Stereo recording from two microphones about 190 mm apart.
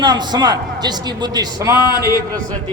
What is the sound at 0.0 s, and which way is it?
A man's voice, 20° right (ahead or behind).